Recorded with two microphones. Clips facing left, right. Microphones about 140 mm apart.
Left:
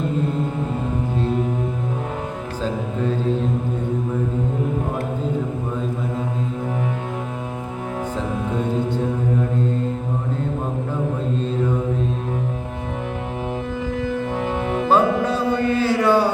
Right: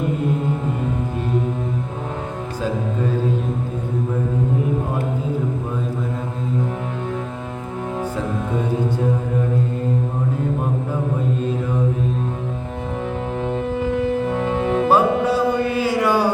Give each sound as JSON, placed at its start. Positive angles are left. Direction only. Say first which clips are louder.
{"t": 13.7, "sound": "music", "louder": "right 5 dB", "side_deg": -30}
{"t": 14.8, "sound": "music", "louder": "even", "side_deg": -10}